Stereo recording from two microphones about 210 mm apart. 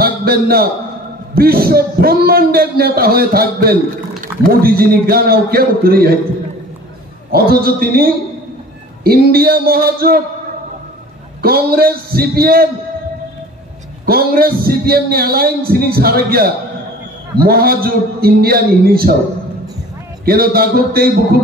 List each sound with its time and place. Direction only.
0.0 s a sound: 45° right (ahead or behind)
1.3 s a man's voice: 45° right (ahead or behind)
7.3 s a man's voice: 45° right (ahead or behind)
11.4 s a man's voice: 45° right (ahead or behind)
14.0 s a man's voice: 45° right (ahead or behind)
20.2 s a man's voice: 45° right (ahead or behind)